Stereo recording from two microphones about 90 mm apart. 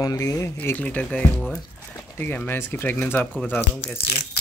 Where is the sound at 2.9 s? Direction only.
15° left (ahead or behind).